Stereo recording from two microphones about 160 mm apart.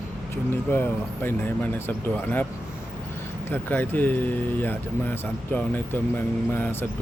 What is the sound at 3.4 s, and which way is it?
Speech, 10° left (ahead or behind).